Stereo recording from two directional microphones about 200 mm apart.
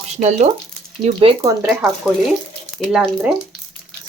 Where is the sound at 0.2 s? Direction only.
35° right (ahead or behind).